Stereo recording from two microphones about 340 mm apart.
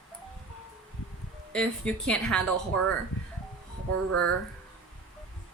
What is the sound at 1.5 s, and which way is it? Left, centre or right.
Speech, centre.